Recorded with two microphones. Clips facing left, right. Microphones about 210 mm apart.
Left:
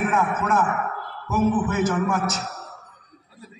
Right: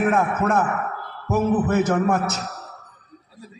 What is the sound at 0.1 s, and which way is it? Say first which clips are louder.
A man's voice: right 2 dB; 60° right (ahead or behind).